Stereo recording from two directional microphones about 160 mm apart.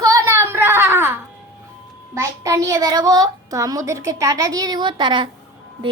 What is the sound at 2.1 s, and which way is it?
A child's voice, 20° right (ahead or behind).